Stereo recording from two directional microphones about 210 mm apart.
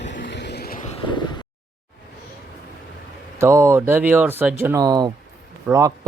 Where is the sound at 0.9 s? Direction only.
20° left (ahead or behind).